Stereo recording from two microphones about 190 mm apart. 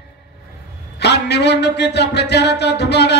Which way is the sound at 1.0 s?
65° left (ahead or behind).